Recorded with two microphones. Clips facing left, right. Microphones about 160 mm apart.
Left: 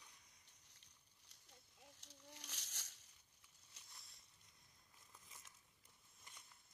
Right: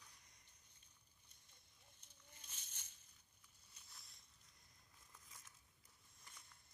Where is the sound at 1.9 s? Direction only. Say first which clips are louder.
Left 9 dB; 85° left.